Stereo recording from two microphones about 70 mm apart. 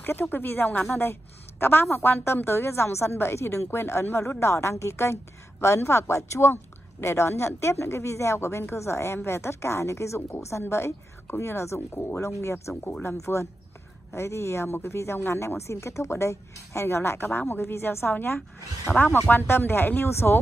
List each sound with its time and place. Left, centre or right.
0.0 s speech: left